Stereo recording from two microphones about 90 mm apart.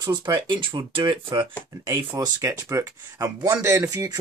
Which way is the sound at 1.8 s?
40° right (ahead or behind).